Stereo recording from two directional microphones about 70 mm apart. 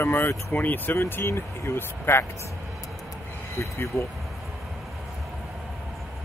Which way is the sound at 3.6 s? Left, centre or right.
Left.